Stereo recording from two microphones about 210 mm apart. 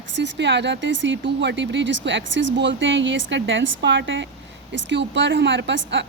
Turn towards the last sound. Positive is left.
turn(degrees=-60)  # may be behind; listen again after turning